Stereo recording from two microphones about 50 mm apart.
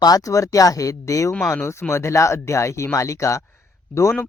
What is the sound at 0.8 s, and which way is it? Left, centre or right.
Speech, left.